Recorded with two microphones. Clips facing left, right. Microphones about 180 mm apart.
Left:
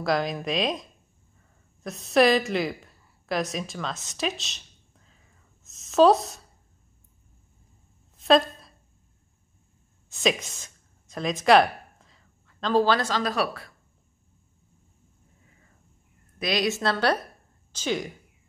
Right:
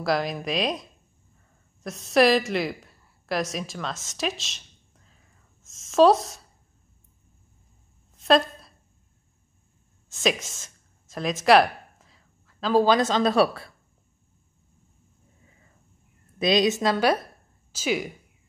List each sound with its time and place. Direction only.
0.0 s a woman's voice: centre (ahead or behind)
8.2 s a sound: centre (ahead or behind)
10.0 s speech: centre (ahead or behind); by 13.7 s 30° right (ahead or behind)
16.3 s a woman's voice: 20° right (ahead or behind)